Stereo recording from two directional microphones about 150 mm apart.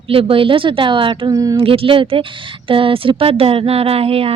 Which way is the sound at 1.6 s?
35° right (ahead or behind).